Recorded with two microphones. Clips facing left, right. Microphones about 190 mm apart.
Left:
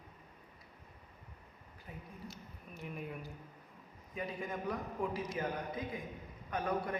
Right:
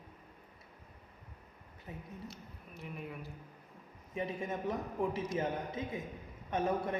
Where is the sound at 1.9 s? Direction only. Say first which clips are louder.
Right 3 dB; 20° right (ahead or behind).